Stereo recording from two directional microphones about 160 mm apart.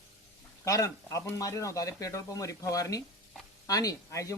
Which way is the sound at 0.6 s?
20° left (ahead or behind).